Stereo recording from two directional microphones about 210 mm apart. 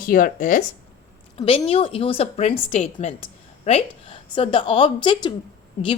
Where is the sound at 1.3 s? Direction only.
25° left (ahead or behind).